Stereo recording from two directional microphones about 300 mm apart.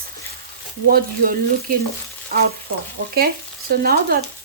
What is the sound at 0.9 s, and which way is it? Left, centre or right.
Speech, right.